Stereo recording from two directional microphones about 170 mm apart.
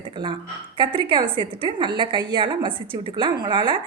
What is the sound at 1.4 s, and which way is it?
A woman's voice, 25° right (ahead or behind).